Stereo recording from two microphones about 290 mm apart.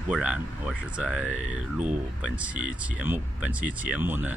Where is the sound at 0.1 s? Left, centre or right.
Centre.